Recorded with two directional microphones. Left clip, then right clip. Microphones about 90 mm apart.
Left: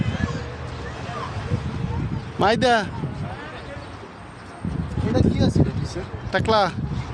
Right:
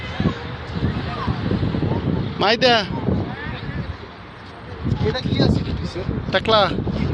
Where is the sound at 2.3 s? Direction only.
45° left (ahead or behind).